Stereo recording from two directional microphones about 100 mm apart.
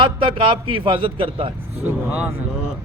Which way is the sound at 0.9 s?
65° right (ahead or behind).